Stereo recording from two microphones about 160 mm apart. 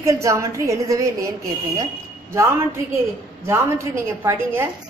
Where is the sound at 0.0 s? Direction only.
20° right (ahead or behind).